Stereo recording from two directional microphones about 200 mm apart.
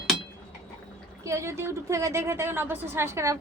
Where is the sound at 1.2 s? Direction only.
15° right (ahead or behind).